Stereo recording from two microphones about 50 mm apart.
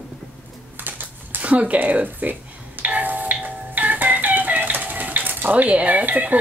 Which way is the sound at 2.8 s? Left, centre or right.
Right.